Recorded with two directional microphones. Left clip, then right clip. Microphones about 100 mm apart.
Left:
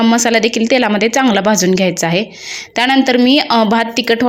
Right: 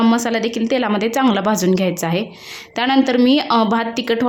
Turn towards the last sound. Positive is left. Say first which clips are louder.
# left 5 dB
turn(degrees=15)  # may be behind; listen again after turning